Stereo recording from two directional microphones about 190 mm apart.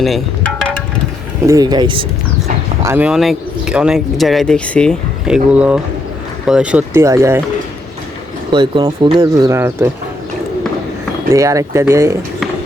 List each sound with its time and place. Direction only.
0.0 s wind chime: centre (ahead or behind)
1.5 s speech: 20° right (ahead or behind)
2.8 s speech: 10° right (ahead or behind)
8.5 s speech: 25° right (ahead or behind)
11.3 s speech: 15° right (ahead or behind)